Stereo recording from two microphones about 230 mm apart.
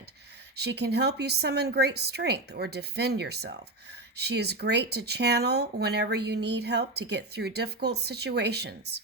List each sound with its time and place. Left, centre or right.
0.5 s a woman's voice: right